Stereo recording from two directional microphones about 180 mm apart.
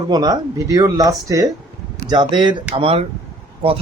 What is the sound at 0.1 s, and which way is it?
Speech, 20° right (ahead or behind).